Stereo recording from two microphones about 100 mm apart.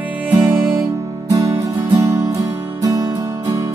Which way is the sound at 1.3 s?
35° right (ahead or behind).